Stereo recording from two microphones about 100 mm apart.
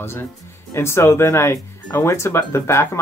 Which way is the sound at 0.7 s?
25° left (ahead or behind).